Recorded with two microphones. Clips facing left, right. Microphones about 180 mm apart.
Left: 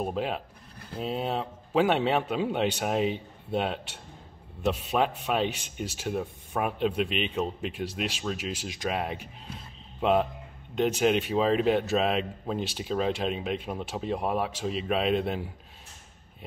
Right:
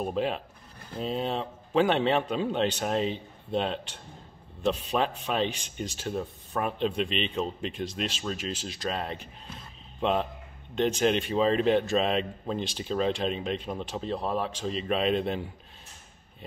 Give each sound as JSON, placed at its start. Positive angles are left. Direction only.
{"t": 0.0, "sound": "a man's voice", "side_deg": 5}